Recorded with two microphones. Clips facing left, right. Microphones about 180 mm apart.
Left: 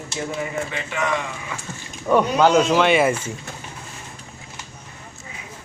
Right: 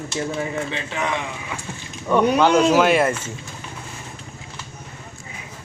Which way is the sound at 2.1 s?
10° left (ahead or behind).